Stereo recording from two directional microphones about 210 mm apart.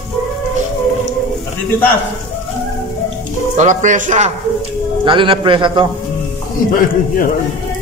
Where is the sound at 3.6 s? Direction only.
35° right (ahead or behind).